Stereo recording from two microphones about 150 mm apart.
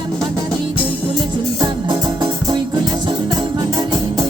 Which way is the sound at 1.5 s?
30° right (ahead or behind).